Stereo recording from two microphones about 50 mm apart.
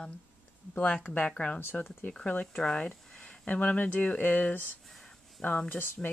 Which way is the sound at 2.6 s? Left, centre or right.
Centre.